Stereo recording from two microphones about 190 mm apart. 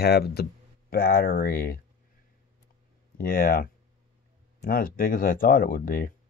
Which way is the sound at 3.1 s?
50° left (ahead or behind).